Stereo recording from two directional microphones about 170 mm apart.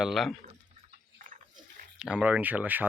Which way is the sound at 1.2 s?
50° right (ahead or behind).